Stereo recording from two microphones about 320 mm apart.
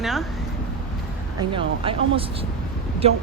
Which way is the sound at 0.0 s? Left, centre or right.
Centre.